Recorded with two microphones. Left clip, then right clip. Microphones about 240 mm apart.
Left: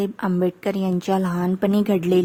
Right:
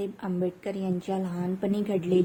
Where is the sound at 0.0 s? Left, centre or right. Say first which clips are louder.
Left 8 dB; left.